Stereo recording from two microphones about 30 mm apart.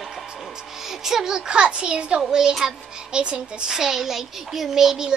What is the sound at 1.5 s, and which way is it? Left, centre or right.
Speech, right.